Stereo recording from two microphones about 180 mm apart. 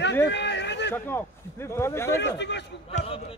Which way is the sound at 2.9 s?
35° left (ahead or behind).